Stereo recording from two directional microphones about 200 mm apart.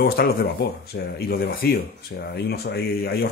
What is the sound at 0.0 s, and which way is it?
Speech, 50° left (ahead or behind).